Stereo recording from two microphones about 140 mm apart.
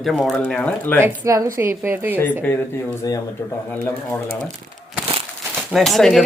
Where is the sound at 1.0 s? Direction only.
20° right (ahead or behind).